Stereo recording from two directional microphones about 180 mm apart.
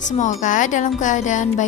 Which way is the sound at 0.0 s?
45° left (ahead or behind).